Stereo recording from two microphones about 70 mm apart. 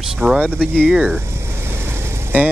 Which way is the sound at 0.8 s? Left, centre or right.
Centre.